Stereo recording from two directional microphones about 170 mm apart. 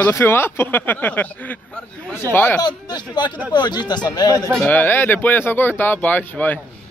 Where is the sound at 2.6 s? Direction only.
25° left (ahead or behind).